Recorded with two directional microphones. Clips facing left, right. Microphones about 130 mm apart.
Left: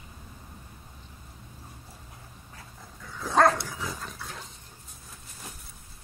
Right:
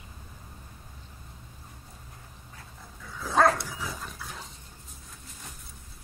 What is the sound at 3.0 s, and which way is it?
Dog, centre (ahead or behind).